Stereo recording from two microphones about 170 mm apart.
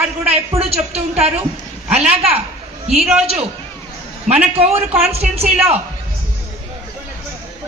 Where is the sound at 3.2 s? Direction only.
35° right (ahead or behind).